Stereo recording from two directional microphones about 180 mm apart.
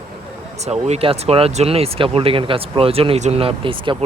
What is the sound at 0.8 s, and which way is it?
Speech, 35° right (ahead or behind).